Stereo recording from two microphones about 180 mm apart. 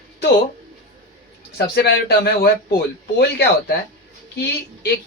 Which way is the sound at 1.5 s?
65° left (ahead or behind).